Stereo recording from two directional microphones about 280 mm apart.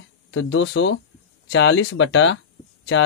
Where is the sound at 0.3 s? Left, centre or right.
Left.